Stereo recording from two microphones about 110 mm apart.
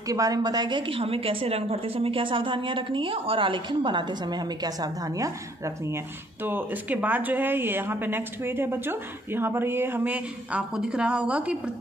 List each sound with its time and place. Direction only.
0.0 s a woman's voice: 30° right (ahead or behind); by 11.7 s 10° right (ahead or behind)